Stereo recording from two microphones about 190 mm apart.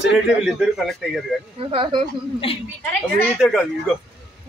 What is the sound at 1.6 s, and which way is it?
Speech, 25° right (ahead or behind).